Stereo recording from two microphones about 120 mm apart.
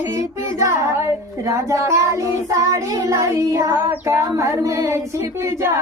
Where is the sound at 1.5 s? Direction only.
25° right (ahead or behind).